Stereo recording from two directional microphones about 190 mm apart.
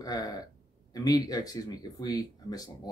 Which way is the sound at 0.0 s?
20° left (ahead or behind).